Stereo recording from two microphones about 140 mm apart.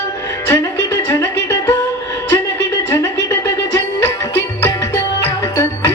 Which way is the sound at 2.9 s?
20° left (ahead or behind).